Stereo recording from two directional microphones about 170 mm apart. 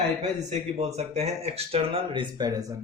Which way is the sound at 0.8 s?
40° right (ahead or behind).